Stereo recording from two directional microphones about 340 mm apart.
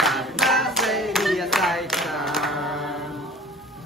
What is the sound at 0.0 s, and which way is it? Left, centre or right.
Clapping, centre.